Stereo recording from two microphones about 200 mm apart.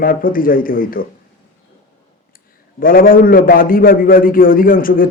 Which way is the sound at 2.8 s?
45° left (ahead or behind).